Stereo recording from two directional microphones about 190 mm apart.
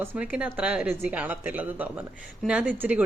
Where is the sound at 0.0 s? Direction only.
5° right (ahead or behind).